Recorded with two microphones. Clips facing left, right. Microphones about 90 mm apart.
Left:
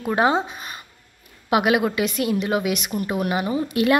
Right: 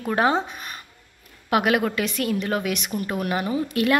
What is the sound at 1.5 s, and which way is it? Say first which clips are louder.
A woman's voice: left 2 dB; 15° left (ahead or behind).